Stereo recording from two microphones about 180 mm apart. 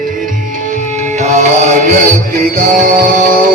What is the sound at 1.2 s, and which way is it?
Music, 40° right (ahead or behind).